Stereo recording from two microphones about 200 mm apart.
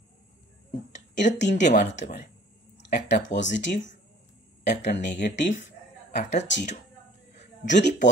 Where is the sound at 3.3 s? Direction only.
65° left (ahead or behind).